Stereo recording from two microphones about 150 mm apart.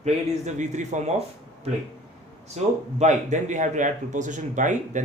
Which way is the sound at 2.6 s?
45° right (ahead or behind).